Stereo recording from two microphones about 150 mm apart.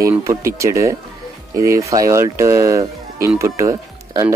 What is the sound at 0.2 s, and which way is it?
Speech, 20° right (ahead or behind).